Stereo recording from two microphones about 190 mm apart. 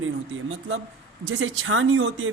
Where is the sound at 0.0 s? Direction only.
90° right.